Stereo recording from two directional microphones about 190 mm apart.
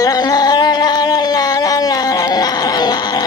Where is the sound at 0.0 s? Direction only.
20° left (ahead or behind).